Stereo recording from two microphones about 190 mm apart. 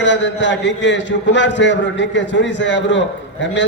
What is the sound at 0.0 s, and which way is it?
A man's voice, 70° left (ahead or behind).